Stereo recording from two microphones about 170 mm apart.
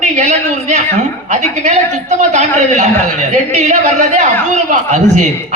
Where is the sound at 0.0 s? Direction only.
45° right (ahead or behind).